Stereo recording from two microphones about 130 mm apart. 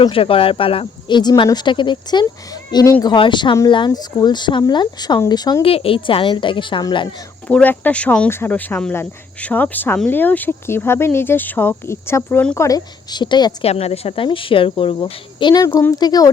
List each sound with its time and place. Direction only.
0.0 s speech: 45° left (ahead or behind)
5.6 s speech: 45° left (ahead or behind)
7.4 s speech: 15° left (ahead or behind)
12.5 s speech: 25° left (ahead or behind)
13.7 s speech: 50° left (ahead or behind); by 16.3 s 30° left (ahead or behind)